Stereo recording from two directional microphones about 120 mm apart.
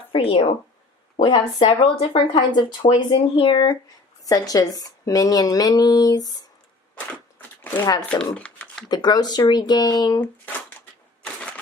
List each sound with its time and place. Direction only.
0.1 s speech: 45° left (ahead or behind)
7.6 s shuffling cards: 15° left (ahead or behind)
8.1 s speech: 10° left (ahead or behind)
8.9 s speech: 35° left (ahead or behind)
10.4 s typewriter: 10° left (ahead or behind)